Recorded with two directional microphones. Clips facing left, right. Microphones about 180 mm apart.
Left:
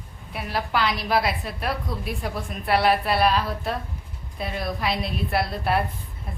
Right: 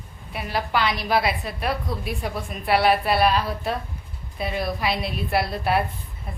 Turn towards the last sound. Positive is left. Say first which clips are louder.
# right 1 dB
turn(degrees=0)  # may be behind; listen again after turning